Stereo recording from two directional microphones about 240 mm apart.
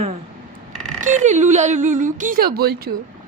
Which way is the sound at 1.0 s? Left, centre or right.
Right.